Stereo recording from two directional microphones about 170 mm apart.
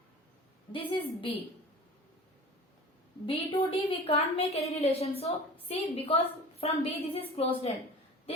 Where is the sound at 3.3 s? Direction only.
35° left (ahead or behind).